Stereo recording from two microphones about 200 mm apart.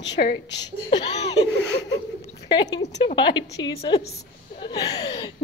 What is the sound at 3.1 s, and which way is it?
A woman's voice, 25° left (ahead or behind).